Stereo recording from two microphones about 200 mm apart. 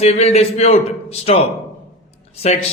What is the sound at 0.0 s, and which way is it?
Speech, 30° left (ahead or behind).